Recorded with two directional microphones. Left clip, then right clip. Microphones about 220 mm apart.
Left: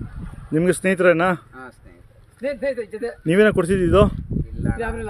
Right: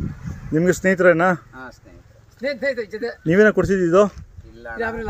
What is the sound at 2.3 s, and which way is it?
Speech, 15° right (ahead or behind).